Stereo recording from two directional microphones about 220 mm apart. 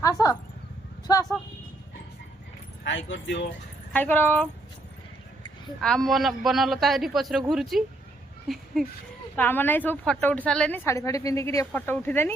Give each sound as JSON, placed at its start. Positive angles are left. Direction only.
{"t": 0.0, "sound": "a woman's voice", "side_deg": 15}
{"t": 2.8, "sound": "speech", "side_deg": 55}
{"t": 3.9, "sound": "a woman's voice", "side_deg": 10}
{"t": 5.8, "sound": "a man's voice", "side_deg": 0}